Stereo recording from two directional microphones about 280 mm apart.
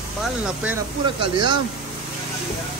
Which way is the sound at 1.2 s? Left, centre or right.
Centre.